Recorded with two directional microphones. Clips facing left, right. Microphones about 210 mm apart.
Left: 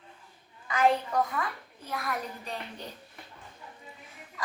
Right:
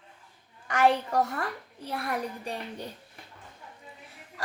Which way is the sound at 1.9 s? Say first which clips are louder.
Right 3 dB; 35° right (ahead or behind).